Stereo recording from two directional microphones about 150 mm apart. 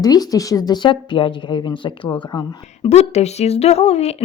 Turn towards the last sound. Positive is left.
turn(degrees=45)  # may be behind; listen again after turning